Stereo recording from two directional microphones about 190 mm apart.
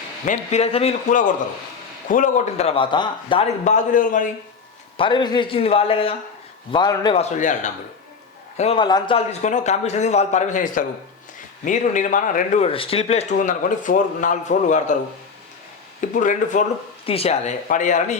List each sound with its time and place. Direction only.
0.3 s speech: 35° left (ahead or behind)
3.6 s speech: 40° left (ahead or behind)
4.9 s a man's voice: 25° left (ahead or behind)
7.2 s speech: 40° left (ahead or behind)
16.0 s speech: 40° left (ahead or behind)